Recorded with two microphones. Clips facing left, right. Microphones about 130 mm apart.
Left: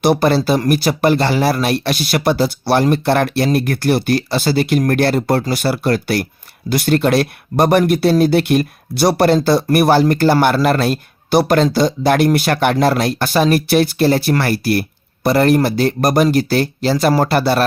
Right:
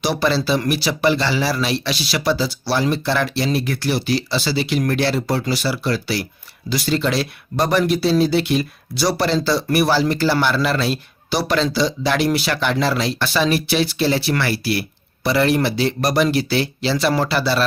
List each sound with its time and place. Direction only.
0.0 s speech: 50° left (ahead or behind)